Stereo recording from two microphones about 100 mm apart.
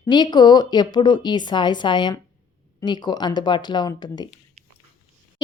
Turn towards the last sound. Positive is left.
turn(degrees=45)  # may be behind; listen again after turning